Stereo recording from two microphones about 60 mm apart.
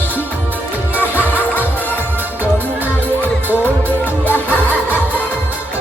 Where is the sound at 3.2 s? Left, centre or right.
Left.